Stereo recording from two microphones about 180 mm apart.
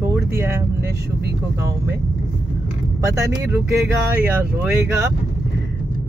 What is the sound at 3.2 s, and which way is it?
Speech, 15° right (ahead or behind).